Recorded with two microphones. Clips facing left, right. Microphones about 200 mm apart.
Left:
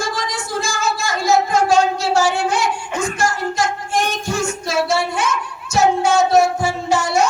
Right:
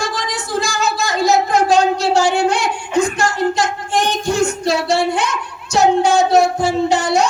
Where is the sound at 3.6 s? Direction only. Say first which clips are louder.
Right 2 dB; 15° right (ahead or behind).